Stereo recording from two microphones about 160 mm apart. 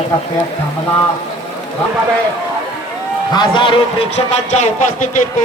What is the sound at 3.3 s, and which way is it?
A man's voice, 30° left (ahead or behind).